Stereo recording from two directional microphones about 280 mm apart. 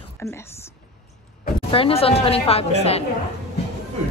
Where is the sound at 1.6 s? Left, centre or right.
Centre.